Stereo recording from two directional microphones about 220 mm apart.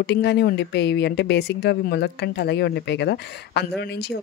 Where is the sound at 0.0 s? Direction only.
50° left (ahead or behind).